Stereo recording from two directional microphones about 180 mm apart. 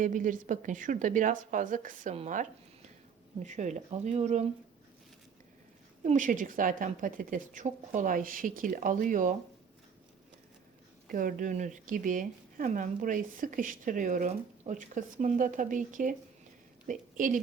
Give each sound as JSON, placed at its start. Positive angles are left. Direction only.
{"t": 0.0, "sound": "speech", "side_deg": -45}
{"t": 6.0, "sound": "speech", "side_deg": -45}
{"t": 11.1, "sound": "a woman's voice", "side_deg": -50}